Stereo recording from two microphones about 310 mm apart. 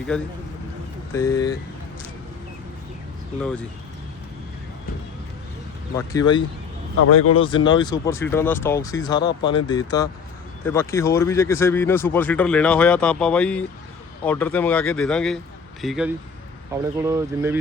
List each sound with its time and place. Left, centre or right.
0.1 s speech: centre
6.0 s speech: centre
7.0 s speech: left
7.3 s speech: centre